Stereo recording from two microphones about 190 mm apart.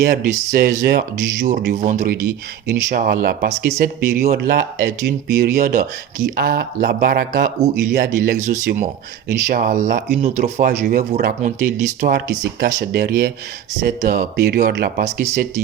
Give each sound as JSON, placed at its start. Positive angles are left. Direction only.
{"t": 0.0, "sound": "speech", "side_deg": -50}
{"t": 2.6, "sound": "speech", "side_deg": -50}
{"t": 10.2, "sound": "speech", "side_deg": -30}
{"t": 10.4, "sound": "speech", "side_deg": -50}